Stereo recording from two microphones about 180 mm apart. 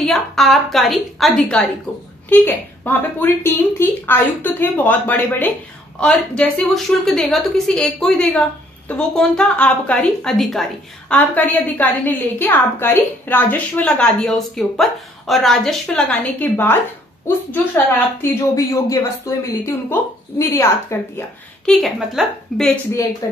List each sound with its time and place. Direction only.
0.0 s a woman's voice: centre (ahead or behind)
18.2 s a woman's voice: 15° left (ahead or behind)
21.6 s a woman's voice: centre (ahead or behind)
23.2 s speech: 20° left (ahead or behind)